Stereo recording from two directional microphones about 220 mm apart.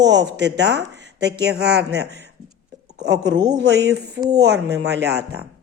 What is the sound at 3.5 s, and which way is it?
A woman's voice, 50° right (ahead or behind).